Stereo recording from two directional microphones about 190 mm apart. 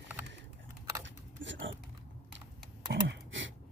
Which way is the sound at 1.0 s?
75° right (ahead or behind).